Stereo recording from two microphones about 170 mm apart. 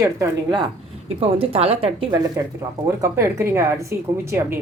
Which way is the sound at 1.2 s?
35° right (ahead or behind).